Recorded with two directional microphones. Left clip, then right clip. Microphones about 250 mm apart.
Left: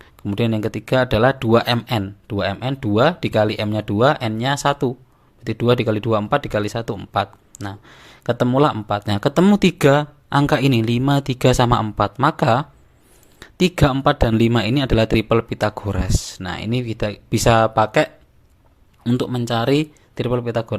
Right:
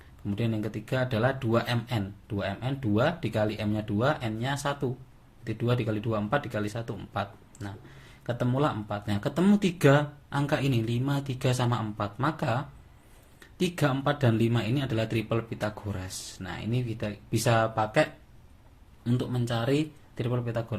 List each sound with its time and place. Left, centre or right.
0.0 s speech: left